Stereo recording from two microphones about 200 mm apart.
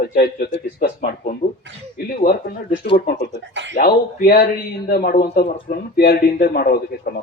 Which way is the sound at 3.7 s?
45° left (ahead or behind).